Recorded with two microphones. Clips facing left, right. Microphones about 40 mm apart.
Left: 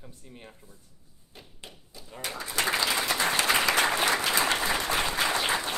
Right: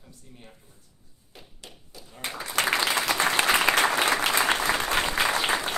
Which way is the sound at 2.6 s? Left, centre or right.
Right.